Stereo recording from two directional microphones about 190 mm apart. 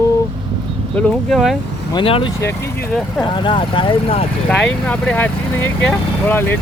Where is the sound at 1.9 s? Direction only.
25° left (ahead or behind).